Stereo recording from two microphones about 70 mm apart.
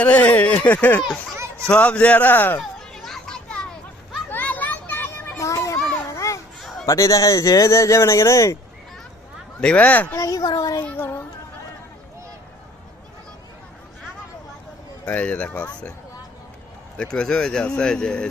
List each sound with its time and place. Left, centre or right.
0.0 s speech: centre
2.6 s children playing: centre
4.3 s children playing: left
5.4 s children playing: left
6.6 s a sound: centre
6.8 s speech: left
9.6 s speech: centre
10.2 s a sound: left
10.9 s children playing: left
15.0 s speech: centre
17.0 s speech: centre